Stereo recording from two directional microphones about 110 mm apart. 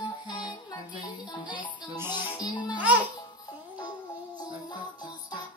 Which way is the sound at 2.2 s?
45° left (ahead or behind).